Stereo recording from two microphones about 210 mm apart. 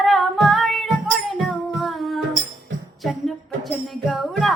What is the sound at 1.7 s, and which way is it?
Singing, centre (ahead or behind).